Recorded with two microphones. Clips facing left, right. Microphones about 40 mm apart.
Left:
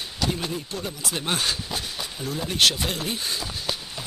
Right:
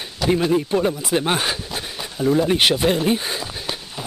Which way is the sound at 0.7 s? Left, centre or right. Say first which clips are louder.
Right 12 dB; right.